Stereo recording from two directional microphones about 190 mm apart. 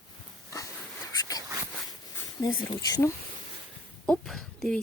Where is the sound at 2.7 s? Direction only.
20° left (ahead or behind).